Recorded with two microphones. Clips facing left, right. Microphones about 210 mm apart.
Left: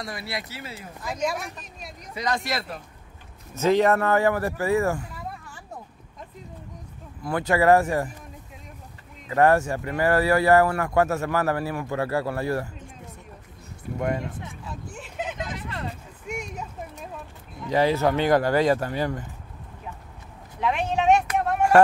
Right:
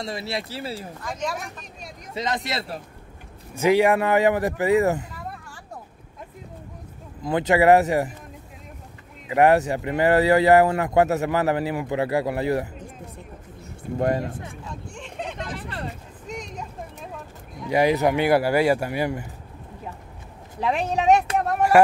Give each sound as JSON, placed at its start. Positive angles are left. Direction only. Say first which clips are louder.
{"t": 0.0, "sound": "speech", "louder": "right 4 dB", "side_deg": -25}
{"t": 1.0, "sound": "speech", "louder": "left 3 dB", "side_deg": 10}
{"t": 2.1, "sound": "speech", "louder": "even", "side_deg": -20}
{"t": 3.5, "sound": "speech", "louder": "right 2 dB", "side_deg": -10}
{"t": 7.2, "sound": "speech", "louder": "right 3 dB", "side_deg": -20}
{"t": 9.3, "sound": "speech", "louder": "right 2 dB", "side_deg": -15}
{"t": 13.9, "sound": "speech", "louder": "right 4 dB", "side_deg": -35}
{"t": 14.7, "sound": "vehicle", "louder": "right 1 dB", "side_deg": 5}
{"t": 16.3, "sound": "a sound", "louder": "left 1 dB", "side_deg": 10}
{"t": 17.6, "sound": "speech", "louder": "right 2 dB", "side_deg": -15}
{"t": 20.6, "sound": "a sound", "louder": "right 1 dB", "side_deg": -35}